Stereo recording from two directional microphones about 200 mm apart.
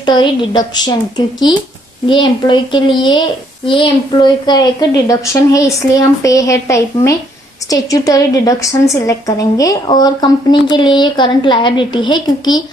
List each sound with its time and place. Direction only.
0.0 s a woman's voice: 20° left (ahead or behind)